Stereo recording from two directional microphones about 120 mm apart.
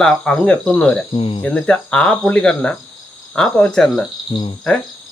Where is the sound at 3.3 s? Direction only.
5° left (ahead or behind).